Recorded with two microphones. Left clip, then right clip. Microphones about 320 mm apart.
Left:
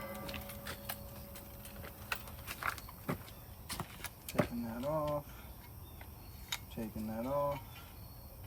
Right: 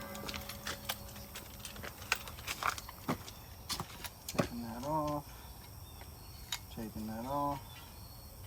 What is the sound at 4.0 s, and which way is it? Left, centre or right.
Vehicle, centre.